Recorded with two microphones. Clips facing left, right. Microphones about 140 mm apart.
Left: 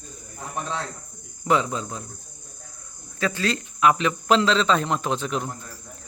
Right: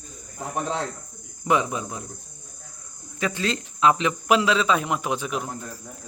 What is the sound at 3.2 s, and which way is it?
A man's voice, 20° right (ahead or behind).